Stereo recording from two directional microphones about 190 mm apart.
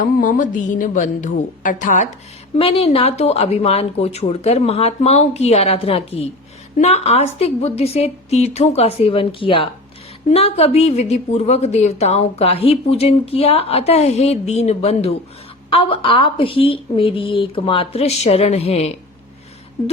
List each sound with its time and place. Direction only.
0.0 s a woman's voice: 45° left (ahead or behind)
2.6 s a woman's voice: 30° left (ahead or behind)